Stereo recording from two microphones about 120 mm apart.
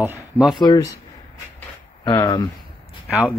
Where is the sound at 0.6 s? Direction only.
35° left (ahead or behind).